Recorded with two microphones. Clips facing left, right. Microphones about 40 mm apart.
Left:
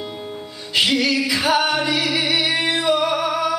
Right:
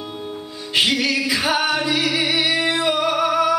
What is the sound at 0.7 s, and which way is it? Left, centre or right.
Music, right.